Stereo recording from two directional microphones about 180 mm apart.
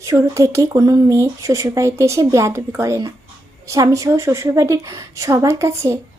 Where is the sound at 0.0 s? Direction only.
15° right (ahead or behind).